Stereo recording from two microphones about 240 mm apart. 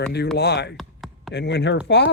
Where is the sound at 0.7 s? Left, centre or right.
Centre.